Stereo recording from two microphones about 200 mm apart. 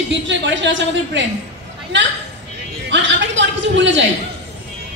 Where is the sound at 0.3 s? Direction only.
65° right (ahead or behind).